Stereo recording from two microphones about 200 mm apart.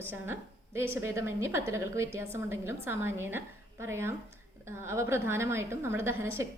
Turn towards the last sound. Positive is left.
turn(degrees=-15)  # may be behind; listen again after turning